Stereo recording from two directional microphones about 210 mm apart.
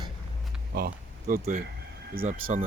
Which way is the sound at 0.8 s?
45° right (ahead or behind).